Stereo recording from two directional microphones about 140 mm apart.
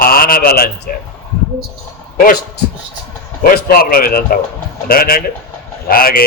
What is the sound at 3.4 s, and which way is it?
A man's voice, 90° left.